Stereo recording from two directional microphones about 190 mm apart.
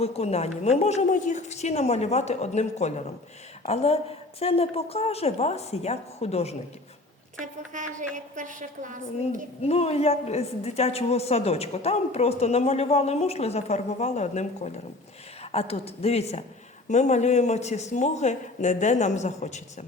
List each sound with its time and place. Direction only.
0.0 s a woman's voice: 35° left (ahead or behind)
7.7 s a woman's voice: 40° right (ahead or behind)
9.2 s a woman's voice: 35° left (ahead or behind)